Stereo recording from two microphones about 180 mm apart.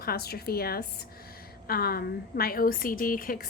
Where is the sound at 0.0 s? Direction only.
60° left (ahead or behind).